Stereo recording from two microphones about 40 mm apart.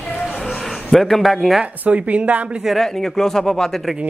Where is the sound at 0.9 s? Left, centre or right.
Centre.